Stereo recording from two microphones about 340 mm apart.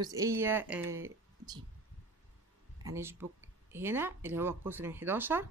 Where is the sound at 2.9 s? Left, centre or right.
Centre.